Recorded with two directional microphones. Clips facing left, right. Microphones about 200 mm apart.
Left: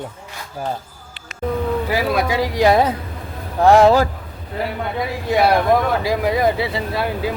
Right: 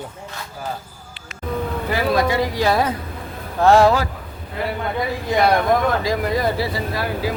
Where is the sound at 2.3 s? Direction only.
75° left (ahead or behind).